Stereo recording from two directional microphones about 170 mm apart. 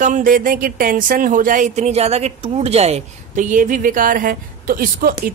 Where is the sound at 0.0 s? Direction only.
50° right (ahead or behind).